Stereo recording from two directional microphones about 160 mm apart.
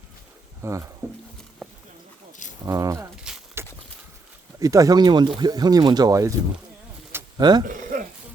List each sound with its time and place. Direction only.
0.6 s speech: 20° right (ahead or behind)
1.6 s clip-clop: centre (ahead or behind)
2.6 s speech: 20° right (ahead or behind)
3.6 s a sound: 15° right (ahead or behind)
4.6 s speech: 20° right (ahead or behind)
7.3 s speech: 25° right (ahead or behind)
7.7 s a sound: 55° right (ahead or behind)